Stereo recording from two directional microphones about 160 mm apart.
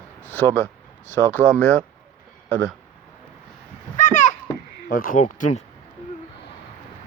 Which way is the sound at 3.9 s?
55° left (ahead or behind).